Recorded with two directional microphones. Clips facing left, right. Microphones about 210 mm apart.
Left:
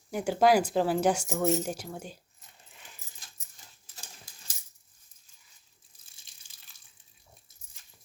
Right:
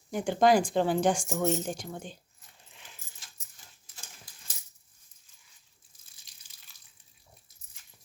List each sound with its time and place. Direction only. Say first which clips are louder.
0.1 s speech: even; 5° left (ahead or behind)